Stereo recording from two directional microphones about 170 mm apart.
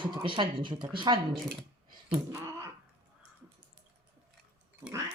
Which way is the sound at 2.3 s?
20° right (ahead or behind).